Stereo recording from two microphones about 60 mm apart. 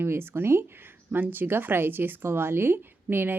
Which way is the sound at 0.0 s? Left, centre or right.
Right.